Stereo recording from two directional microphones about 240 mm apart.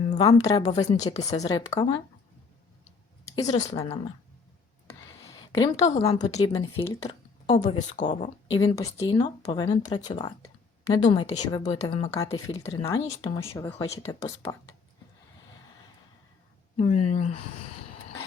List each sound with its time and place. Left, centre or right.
0.1 s speech: centre
1.5 s speech: centre
3.3 s speech: left
4.9 s a sound: centre
6.5 s speech: centre
8.5 s speech: centre
14.0 s speech: left
16.7 s speech: left